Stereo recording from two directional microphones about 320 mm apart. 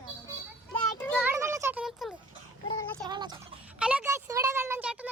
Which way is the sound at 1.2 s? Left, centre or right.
Centre.